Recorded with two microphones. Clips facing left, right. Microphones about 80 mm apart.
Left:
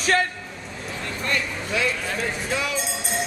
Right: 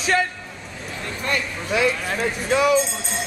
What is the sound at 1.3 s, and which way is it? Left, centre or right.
Speech, centre.